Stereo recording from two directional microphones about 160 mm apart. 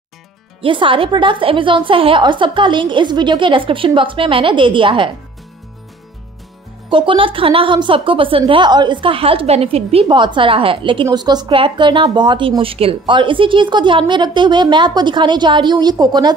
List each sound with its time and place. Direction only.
0.6 s a woman's voice: 30° right (ahead or behind)
6.9 s a woman's voice: 30° right (ahead or behind)